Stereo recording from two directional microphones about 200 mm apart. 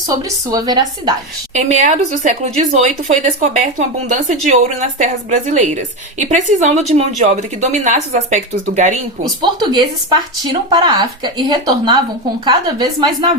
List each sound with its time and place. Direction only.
0.1 s speech: 20° right (ahead or behind)
1.5 s a woman's voice: 35° right (ahead or behind)
9.4 s speech: 20° right (ahead or behind)